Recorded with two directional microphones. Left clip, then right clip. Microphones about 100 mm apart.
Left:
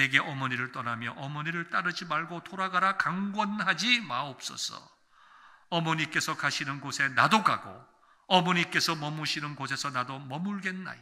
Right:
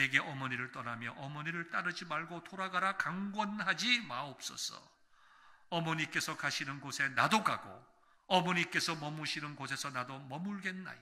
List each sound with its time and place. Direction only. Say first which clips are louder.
0.0 s a man's voice: left 6 dB; 30° left (ahead or behind)